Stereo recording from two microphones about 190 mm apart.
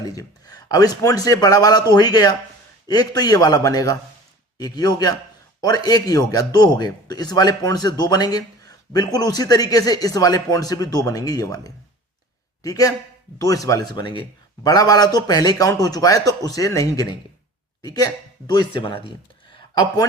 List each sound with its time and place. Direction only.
0.0 s a man's voice: 20° left (ahead or behind)